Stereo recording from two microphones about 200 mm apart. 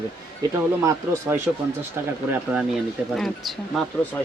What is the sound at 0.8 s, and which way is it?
Speech, 15° right (ahead or behind).